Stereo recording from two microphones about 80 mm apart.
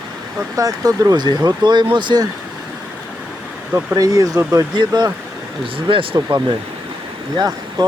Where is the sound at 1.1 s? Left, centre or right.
Right.